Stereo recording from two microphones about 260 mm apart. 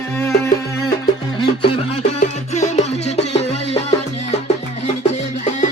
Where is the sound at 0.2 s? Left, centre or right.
Centre.